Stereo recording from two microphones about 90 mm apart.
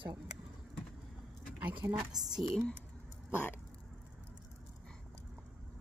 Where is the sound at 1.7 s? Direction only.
55° right (ahead or behind).